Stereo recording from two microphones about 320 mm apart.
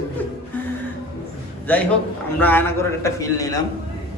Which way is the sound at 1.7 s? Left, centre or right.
Centre.